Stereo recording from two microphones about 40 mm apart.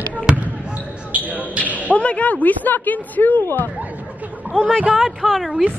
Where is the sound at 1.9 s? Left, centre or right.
Left.